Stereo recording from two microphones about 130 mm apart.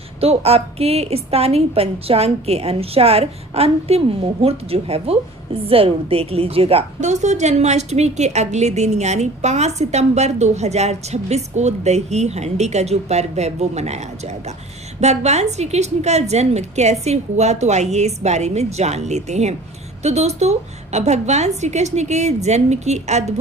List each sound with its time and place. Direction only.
0.2 s a woman's voice: 50° right (ahead or behind)